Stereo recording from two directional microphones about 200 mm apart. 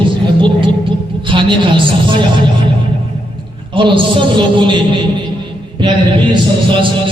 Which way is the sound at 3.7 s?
25° right (ahead or behind).